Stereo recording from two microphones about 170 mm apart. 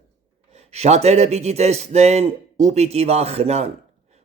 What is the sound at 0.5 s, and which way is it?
Speech, 40° right (ahead or behind).